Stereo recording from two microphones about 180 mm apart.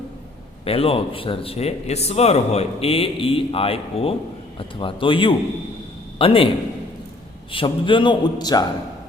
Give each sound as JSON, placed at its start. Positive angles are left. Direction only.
{"t": 0.6, "sound": "a man's voice", "side_deg": 30}
{"t": 7.5, "sound": "a man's voice", "side_deg": 30}